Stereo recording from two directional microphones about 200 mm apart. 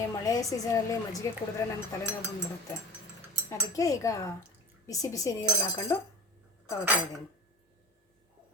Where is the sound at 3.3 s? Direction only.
15° left (ahead or behind).